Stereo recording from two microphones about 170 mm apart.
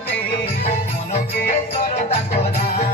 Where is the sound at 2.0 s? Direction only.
40° left (ahead or behind).